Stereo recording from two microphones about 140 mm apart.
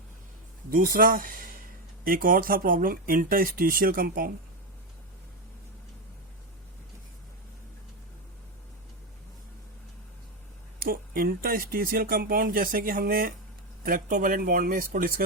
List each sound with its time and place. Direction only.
0.7 s speech: 90° right
10.8 s speech: 90° right